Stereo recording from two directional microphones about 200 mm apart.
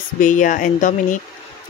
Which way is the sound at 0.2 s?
40° left (ahead or behind).